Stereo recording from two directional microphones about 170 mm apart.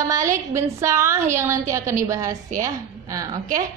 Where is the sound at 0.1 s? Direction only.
20° right (ahead or behind).